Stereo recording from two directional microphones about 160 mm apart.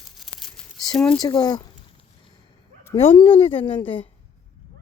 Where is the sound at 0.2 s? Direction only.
Centre (ahead or behind).